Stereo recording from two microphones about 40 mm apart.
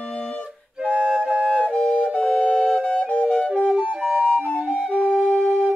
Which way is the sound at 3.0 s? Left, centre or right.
Left.